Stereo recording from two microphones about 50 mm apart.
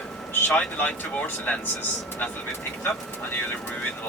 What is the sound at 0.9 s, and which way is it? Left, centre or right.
Speech, left.